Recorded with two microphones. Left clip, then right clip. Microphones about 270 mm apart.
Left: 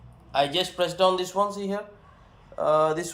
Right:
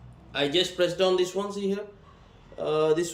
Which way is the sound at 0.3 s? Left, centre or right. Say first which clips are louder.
Left 1 dB; centre.